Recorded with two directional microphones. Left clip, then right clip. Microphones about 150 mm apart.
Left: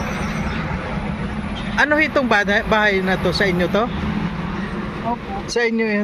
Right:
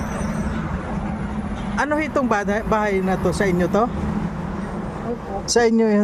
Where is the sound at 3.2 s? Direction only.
30° right (ahead or behind).